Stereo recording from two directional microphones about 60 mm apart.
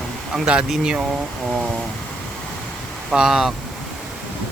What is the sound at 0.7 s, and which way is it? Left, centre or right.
Speech, centre.